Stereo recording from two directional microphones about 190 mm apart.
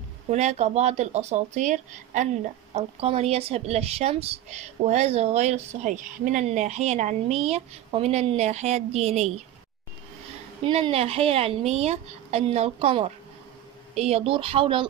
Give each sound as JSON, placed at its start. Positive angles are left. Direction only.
{"t": 0.3, "sound": "speech", "side_deg": -35}
{"t": 10.6, "sound": "speech", "side_deg": -30}